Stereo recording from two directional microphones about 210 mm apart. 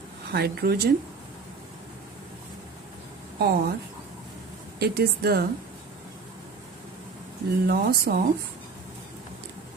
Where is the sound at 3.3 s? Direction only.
50° right (ahead or behind).